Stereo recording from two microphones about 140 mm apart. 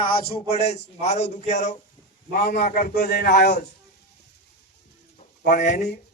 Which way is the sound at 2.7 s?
85° left.